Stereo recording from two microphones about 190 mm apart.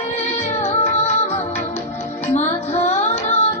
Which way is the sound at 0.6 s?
35° left (ahead or behind).